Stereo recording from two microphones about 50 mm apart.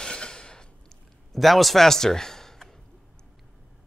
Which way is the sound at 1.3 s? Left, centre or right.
Centre.